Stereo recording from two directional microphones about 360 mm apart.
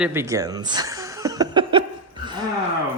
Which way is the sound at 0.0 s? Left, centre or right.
Centre.